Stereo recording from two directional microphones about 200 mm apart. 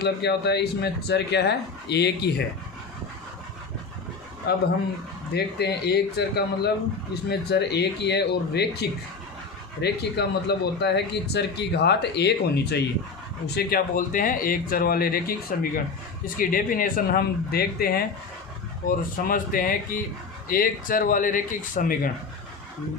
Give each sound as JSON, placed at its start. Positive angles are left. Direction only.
{"t": 0.0, "sound": "speech", "side_deg": 55}
{"t": 4.5, "sound": "speech", "side_deg": 55}